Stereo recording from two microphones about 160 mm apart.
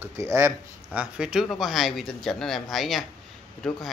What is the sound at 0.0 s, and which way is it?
Speech, 15° right (ahead or behind).